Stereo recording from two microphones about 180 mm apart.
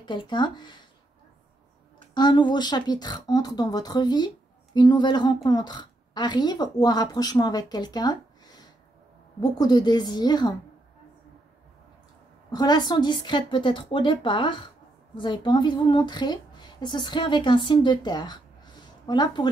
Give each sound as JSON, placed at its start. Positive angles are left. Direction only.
{"t": 0.0, "sound": "a woman's voice", "side_deg": 25}
{"t": 2.1, "sound": "a woman's voice", "side_deg": 25}
{"t": 12.4, "sound": "a woman's voice", "side_deg": 20}